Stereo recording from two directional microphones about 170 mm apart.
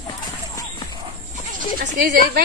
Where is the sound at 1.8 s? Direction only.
60° right (ahead or behind).